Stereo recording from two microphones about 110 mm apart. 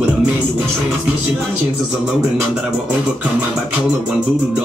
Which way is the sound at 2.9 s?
15° right (ahead or behind).